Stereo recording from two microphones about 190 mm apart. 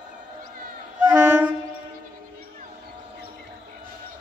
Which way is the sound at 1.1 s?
10° right (ahead or behind).